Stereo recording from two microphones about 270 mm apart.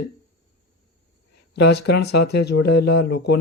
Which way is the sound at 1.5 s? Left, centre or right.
Left.